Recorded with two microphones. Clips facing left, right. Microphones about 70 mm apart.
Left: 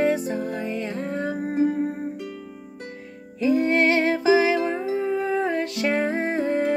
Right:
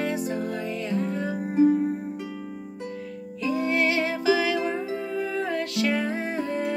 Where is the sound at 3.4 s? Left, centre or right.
Left.